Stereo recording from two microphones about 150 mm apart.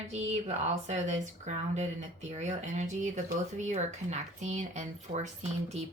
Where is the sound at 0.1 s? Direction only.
50° right (ahead or behind).